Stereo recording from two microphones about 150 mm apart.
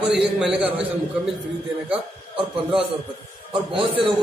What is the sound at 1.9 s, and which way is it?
Speech, 35° right (ahead or behind).